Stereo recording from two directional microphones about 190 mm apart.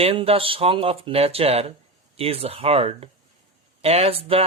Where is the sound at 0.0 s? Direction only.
30° right (ahead or behind).